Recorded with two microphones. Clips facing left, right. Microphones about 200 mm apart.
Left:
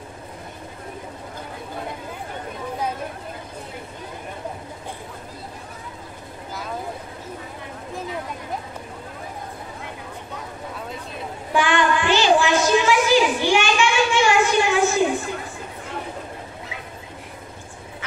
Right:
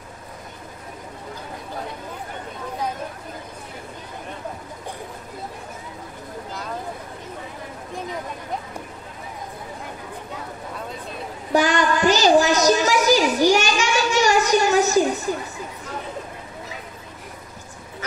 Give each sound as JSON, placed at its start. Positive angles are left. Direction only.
{"t": 11.5, "sound": "child singing", "side_deg": -40}